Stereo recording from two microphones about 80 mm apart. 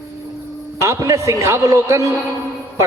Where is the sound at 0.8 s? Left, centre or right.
Right.